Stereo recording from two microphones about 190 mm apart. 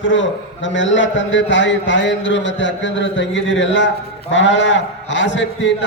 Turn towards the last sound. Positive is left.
turn(degrees=70)  # may be behind; listen again after turning